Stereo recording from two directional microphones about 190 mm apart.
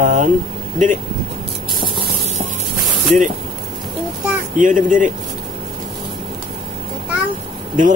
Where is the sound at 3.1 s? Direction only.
40° right (ahead or behind).